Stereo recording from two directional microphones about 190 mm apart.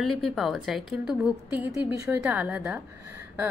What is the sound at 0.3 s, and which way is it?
A woman's voice, centre (ahead or behind).